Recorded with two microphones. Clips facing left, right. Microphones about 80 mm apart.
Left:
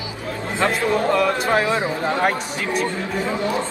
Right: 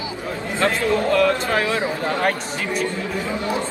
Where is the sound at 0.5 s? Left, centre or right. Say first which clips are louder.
Even; left.